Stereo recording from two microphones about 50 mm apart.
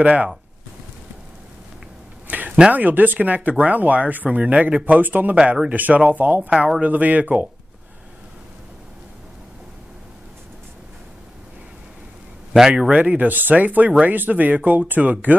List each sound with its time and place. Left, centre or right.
0.0 s speech: right
2.2 s a sound: right
2.7 s speech: right
5.0 s speech: right
12.5 s speech: centre
12.9 s speech: right
13.3 s speech: right